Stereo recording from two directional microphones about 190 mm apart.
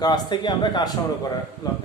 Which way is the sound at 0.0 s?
20° left (ahead or behind).